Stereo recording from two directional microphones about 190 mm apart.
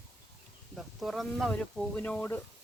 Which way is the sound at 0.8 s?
Centre (ahead or behind).